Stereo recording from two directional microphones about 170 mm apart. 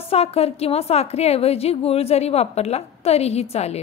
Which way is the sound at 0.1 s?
35° left (ahead or behind).